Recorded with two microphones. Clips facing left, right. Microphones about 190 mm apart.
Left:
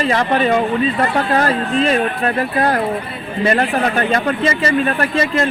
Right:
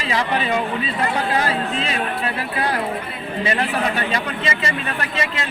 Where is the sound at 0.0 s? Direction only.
50° left (ahead or behind).